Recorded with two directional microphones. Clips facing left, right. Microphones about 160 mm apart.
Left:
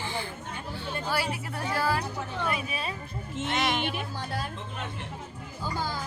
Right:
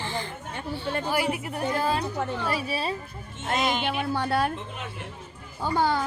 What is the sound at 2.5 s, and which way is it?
Speech, 35° right (ahead or behind).